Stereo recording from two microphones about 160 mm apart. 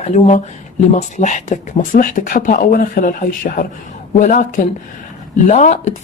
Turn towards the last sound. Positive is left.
turn(degrees=45)  # may be behind; listen again after turning